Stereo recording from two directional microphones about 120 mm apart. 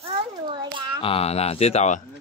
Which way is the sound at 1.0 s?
50° left (ahead or behind).